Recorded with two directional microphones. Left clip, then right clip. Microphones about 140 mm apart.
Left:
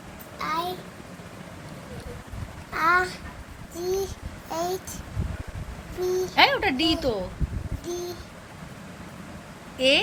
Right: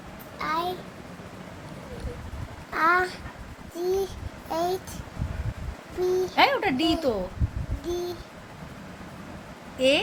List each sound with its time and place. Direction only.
0.3 s a sound: 20° right (ahead or behind)
2.7 s a child's voice: 25° right (ahead or behind)
6.0 s a child's voice: 25° right (ahead or behind)
6.3 s a woman's voice: 10° right (ahead or behind)
9.7 s speech: 10° right (ahead or behind)